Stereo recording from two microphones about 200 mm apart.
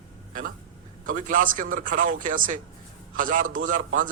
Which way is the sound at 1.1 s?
40° right (ahead or behind).